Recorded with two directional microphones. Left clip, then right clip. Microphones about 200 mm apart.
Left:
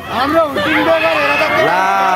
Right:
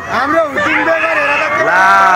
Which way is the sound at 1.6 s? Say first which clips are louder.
Right 4 dB; 10° left (ahead or behind).